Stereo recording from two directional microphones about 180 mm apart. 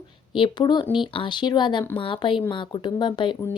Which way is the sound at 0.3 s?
25° left (ahead or behind).